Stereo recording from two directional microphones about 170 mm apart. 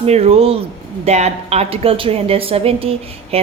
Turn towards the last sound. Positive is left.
turn(degrees=-35)  # may be behind; listen again after turning